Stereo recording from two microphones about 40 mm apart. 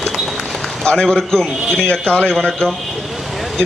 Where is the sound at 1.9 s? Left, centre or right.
Left.